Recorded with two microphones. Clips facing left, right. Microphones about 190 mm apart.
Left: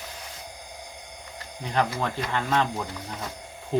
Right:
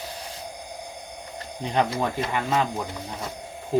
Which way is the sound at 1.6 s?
20° right (ahead or behind).